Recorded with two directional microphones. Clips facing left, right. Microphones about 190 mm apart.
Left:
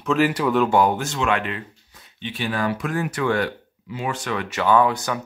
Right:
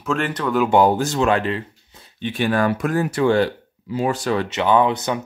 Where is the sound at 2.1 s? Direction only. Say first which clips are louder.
Right 6 dB; 50° right (ahead or behind).